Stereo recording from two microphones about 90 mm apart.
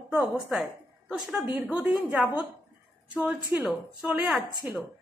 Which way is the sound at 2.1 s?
15° right (ahead or behind).